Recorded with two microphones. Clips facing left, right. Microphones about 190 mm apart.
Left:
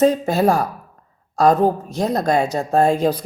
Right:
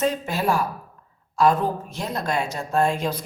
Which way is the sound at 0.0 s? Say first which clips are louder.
Left 8 dB; 40° left (ahead or behind).